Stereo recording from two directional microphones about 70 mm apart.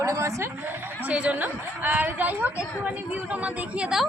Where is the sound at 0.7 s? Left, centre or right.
Right.